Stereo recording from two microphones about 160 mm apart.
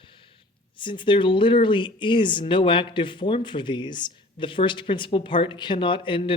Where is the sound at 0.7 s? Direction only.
30° left (ahead or behind).